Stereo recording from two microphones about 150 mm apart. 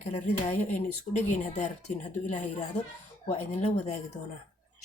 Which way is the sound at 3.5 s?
45° left (ahead or behind).